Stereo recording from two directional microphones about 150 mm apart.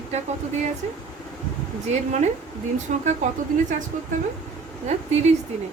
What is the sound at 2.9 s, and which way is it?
Speech, 55° right (ahead or behind).